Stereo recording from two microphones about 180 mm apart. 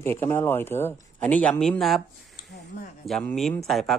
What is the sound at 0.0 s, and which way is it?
Speech, 15° left (ahead or behind).